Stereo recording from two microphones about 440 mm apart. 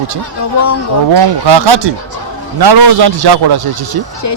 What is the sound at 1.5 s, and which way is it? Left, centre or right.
A man's voice, right.